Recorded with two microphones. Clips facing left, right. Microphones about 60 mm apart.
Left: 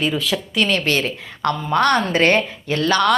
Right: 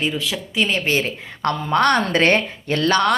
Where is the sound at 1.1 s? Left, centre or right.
Right.